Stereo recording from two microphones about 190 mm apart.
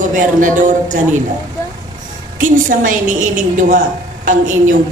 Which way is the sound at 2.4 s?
45° right (ahead or behind).